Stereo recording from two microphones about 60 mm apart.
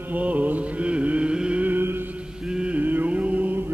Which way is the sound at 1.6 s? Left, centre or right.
Right.